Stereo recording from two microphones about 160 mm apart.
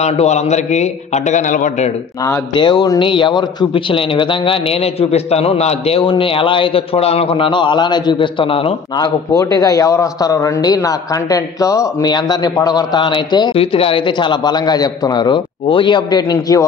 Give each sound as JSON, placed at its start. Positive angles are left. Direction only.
{"t": 0.0, "sound": "a man's voice", "side_deg": 45}
{"t": 2.5, "sound": "a man's voice", "side_deg": 30}